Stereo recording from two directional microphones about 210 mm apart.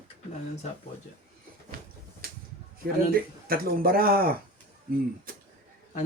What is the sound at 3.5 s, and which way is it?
Speech, 45° right (ahead or behind).